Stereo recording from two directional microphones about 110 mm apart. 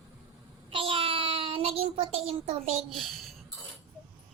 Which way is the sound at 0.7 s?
55° right (ahead or behind).